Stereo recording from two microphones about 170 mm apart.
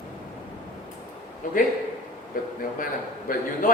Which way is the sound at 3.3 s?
55° left (ahead or behind).